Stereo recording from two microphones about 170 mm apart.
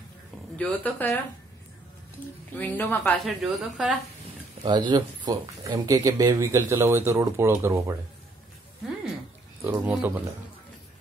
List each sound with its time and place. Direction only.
0.6 s a woman's voice: 10° left (ahead or behind)
2.5 s a woman's voice: 10° left (ahead or behind)
3.3 s a woman's voice: centre (ahead or behind)
4.6 s speech: 25° right (ahead or behind)
9.6 s speech: 10° right (ahead or behind)